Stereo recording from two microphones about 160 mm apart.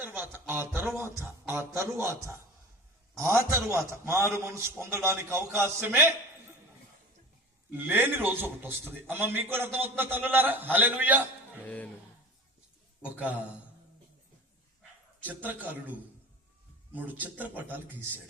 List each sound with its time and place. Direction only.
0.0 s a man's voice: 10° right (ahead or behind)
7.7 s a man's voice: 10° right (ahead or behind)
11.6 s speech: 10° left (ahead or behind)
13.1 s a man's voice: 10° right (ahead or behind)
15.4 s a man's voice: 10° right (ahead or behind)
16.9 s a man's voice: 10° right (ahead or behind)